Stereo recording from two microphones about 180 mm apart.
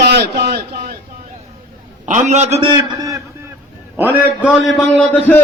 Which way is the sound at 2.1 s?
40° right (ahead or behind).